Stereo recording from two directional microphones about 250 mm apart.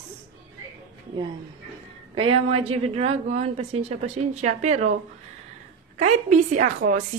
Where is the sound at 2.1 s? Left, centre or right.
Right.